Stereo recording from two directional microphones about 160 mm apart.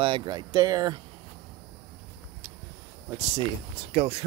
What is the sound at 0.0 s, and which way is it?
Speech, 30° right (ahead or behind).